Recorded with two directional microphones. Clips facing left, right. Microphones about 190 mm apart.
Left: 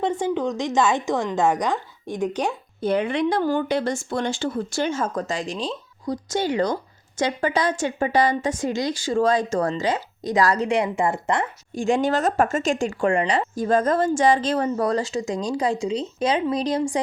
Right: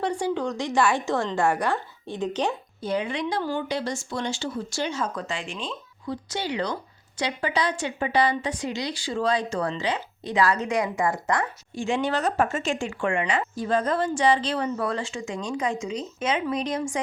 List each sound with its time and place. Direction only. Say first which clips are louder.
0.0 s a woman's voice: left 3 dB; 20° left (ahead or behind)
2.8 s a woman's voice: left 6 dB; 60° left (ahead or behind); by 11.4 s 25° left (ahead or behind)
11.7 s speech: left 5 dB; 45° left (ahead or behind)